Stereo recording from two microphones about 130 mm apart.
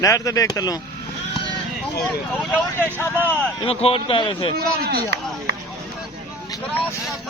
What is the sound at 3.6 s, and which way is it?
Speech, 50° left (ahead or behind).